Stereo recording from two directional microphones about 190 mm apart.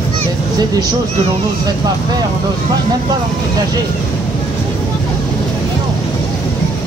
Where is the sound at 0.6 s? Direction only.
20° right (ahead or behind).